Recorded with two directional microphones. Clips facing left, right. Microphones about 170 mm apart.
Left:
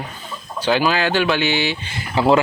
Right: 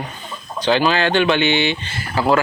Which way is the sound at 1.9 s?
25° left (ahead or behind).